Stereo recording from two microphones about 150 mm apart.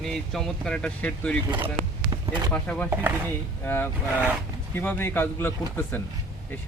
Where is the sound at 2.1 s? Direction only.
30° right (ahead or behind).